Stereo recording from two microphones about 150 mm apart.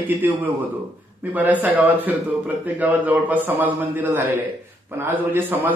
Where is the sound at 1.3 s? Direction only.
10° right (ahead or behind).